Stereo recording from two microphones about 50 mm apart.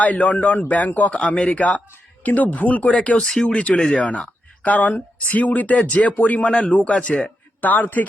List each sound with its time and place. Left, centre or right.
0.0 s a man's voice: left
2.9 s speech: left
3.2 s speech: centre
3.5 s speech: left
7.7 s a man's voice: left